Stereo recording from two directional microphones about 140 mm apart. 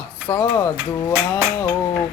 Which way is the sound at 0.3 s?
15° left (ahead or behind).